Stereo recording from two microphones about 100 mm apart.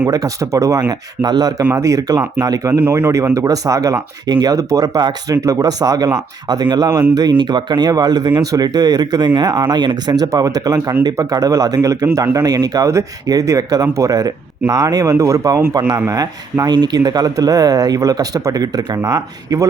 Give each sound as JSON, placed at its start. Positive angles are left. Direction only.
{"t": 0.1, "sound": "speech", "side_deg": -35}
{"t": 0.9, "sound": "speech", "side_deg": -45}
{"t": 5.4, "sound": "speech", "side_deg": -30}